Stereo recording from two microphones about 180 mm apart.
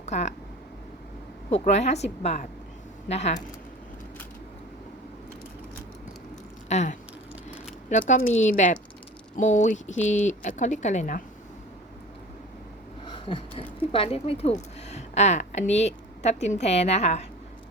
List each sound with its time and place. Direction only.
0.0 s speech: 40° left (ahead or behind)
1.5 s a woman's voice: 35° left (ahead or behind)
6.7 s a sound: 40° left (ahead or behind)
7.9 s a woman's voice: 40° left (ahead or behind)
13.1 s a sound: 25° left (ahead or behind)
13.9 s a woman's voice: 30° left (ahead or behind)